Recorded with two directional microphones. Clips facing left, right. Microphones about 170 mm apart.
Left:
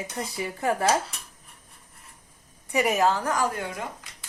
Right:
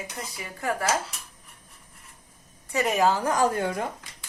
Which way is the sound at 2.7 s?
15° left (ahead or behind).